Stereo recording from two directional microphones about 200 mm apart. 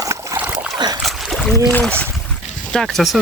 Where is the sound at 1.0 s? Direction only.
Centre (ahead or behind).